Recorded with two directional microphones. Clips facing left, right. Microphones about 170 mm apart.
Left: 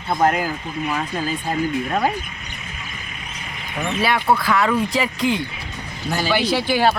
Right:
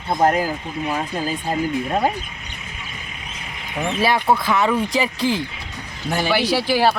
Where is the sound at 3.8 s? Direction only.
25° right (ahead or behind).